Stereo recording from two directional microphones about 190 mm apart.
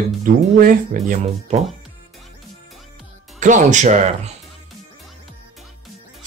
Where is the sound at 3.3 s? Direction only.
40° right (ahead or behind).